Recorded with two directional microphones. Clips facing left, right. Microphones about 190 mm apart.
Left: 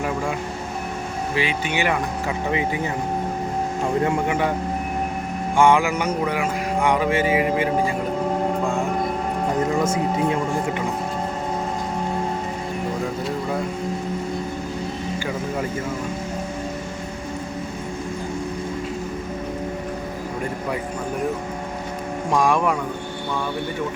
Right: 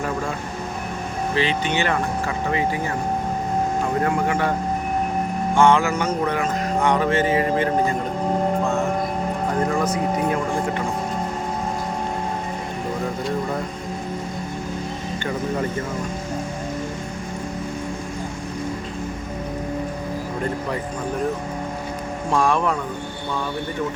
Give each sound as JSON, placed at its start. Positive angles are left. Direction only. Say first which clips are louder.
{"t": 1.4, "sound": "speech", "louder": "right 1 dB", "side_deg": 10}
{"t": 4.0, "sound": "speech", "louder": "even", "side_deg": 15}
{"t": 5.5, "sound": "speech", "louder": "even", "side_deg": 15}
{"t": 22.3, "sound": "speech", "louder": "left 1 dB", "side_deg": 15}